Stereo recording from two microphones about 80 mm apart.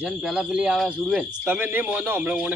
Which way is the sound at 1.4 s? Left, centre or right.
Right.